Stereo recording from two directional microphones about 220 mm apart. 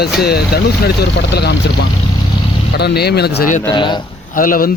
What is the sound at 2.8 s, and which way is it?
Speech, 45° left (ahead or behind).